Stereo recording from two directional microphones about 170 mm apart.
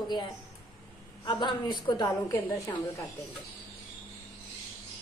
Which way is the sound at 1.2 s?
25° left (ahead or behind).